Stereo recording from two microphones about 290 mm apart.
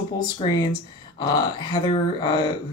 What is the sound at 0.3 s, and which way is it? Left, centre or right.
Speech, centre.